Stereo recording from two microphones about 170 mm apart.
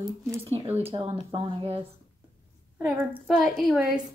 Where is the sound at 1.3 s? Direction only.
35° right (ahead or behind).